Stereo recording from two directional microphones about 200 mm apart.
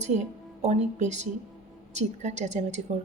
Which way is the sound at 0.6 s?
35° right (ahead or behind).